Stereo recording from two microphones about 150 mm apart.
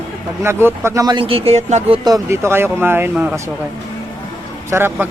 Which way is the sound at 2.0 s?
20° right (ahead or behind).